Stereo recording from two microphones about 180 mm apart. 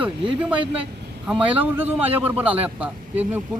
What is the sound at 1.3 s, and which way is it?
A man's voice, 5° right (ahead or behind).